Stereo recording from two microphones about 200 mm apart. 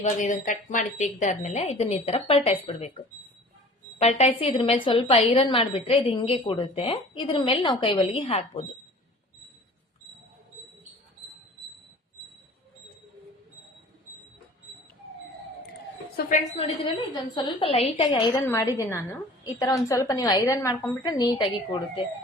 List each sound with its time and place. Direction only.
0.2 s a woman's voice: 40° left (ahead or behind)
4.2 s a woman's voice: 30° left (ahead or behind)
16.2 s a woman's voice: 50° left (ahead or behind)
16.6 s a woman's voice: 30° left (ahead or behind)